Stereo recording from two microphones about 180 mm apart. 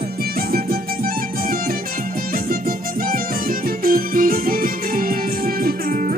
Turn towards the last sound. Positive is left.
turn(degrees=-55)  # may be behind; listen again after turning